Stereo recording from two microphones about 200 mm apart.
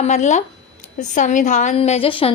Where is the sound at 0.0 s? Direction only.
35° left (ahead or behind).